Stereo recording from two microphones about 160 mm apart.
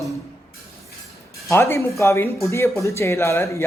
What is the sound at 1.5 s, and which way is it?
Speech, 15° left (ahead or behind).